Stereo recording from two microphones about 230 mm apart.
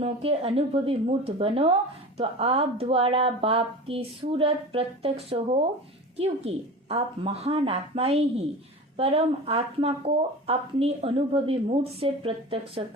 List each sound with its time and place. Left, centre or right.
0.0 s speech: right